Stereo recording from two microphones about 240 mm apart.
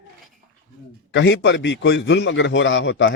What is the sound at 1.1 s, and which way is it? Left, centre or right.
A man's voice, left.